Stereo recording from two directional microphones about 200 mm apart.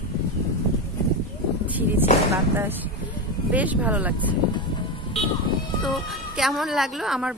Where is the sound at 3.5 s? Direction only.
10° right (ahead or behind).